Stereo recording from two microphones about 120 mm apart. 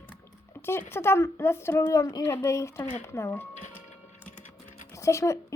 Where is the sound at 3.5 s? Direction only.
85° left.